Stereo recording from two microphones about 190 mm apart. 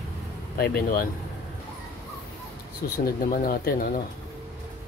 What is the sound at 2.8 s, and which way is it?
Speech, 55° left (ahead or behind).